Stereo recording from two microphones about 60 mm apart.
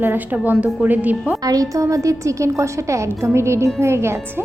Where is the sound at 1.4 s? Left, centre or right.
Right.